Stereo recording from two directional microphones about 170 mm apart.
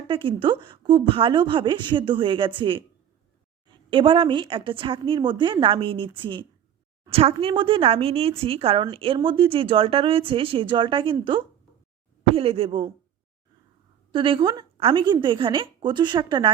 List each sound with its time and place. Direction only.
0.1 s a woman's voice: 30° right (ahead or behind)
14.1 s a woman's voice: 30° right (ahead or behind)